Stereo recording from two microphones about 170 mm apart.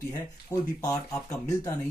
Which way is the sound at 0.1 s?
15° left (ahead or behind).